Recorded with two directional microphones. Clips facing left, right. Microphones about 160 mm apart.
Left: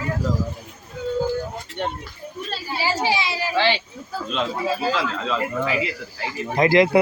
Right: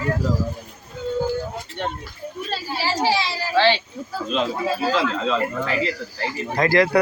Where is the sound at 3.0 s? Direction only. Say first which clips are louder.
Right 1 dB; 20° left (ahead or behind).